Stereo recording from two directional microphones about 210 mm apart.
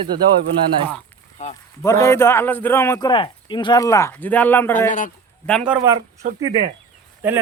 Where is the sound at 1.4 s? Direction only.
35° left (ahead or behind).